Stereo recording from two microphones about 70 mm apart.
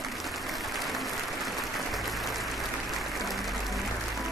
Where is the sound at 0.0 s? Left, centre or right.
Centre.